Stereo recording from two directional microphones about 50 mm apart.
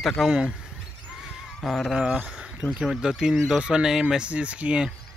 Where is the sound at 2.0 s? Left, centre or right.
Right.